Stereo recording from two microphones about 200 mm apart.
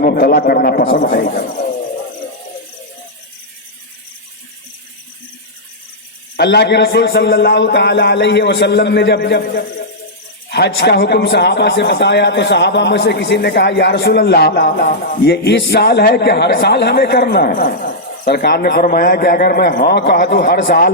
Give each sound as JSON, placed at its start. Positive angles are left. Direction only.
{"t": 0.0, "sound": "speech", "side_deg": 50}
{"t": 6.3, "sound": "a man's voice", "side_deg": 55}